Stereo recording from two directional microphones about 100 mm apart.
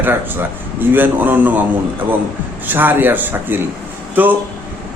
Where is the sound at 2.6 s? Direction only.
20° right (ahead or behind).